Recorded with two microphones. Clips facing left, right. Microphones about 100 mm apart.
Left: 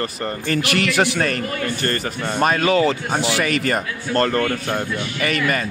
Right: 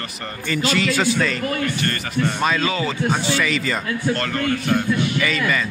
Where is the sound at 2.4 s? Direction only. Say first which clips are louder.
Left 9 dB; 55° left (ahead or behind).